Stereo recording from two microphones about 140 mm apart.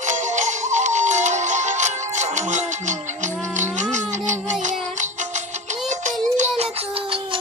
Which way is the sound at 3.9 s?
60° right (ahead or behind).